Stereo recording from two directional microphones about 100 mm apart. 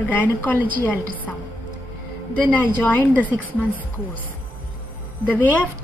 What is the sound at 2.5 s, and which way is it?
Speech, 15° left (ahead or behind).